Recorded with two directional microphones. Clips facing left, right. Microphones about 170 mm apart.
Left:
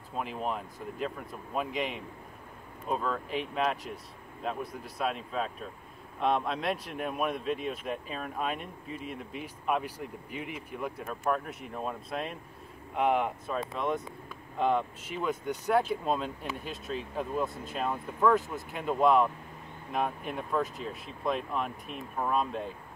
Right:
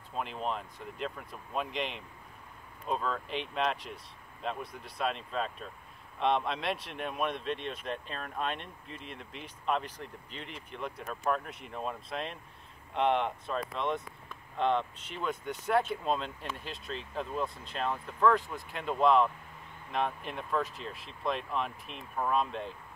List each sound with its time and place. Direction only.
0.1 s speech: 5° left (ahead or behind)